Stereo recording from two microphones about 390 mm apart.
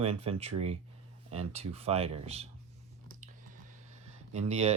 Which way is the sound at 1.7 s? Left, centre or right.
Centre.